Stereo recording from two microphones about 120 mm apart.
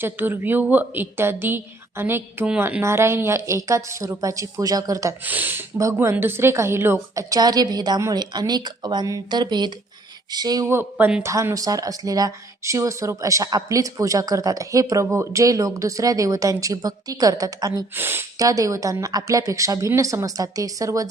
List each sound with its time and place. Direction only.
0.0 s a woman's voice: 15° right (ahead or behind)
5.2 s a woman's voice: 15° right (ahead or behind); by 10.7 s 35° right (ahead or behind)
10.7 s a woman's voice: 15° right (ahead or behind)
11.2 s speech: 25° right (ahead or behind)
17.9 s speech: 20° right (ahead or behind)